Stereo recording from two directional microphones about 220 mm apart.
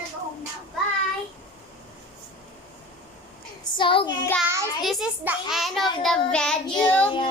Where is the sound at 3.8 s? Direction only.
20° left (ahead or behind).